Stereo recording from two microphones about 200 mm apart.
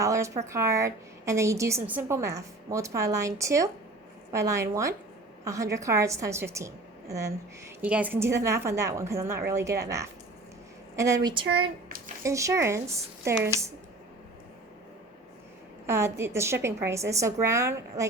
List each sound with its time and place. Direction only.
0.0 s a woman's voice: 15° right (ahead or behind)
10.9 s a woman's voice: 15° right (ahead or behind)
11.9 s a sound: 45° right (ahead or behind)
12.2 s a woman's voice: 15° right (ahead or behind)
15.9 s a woman's voice: 15° right (ahead or behind)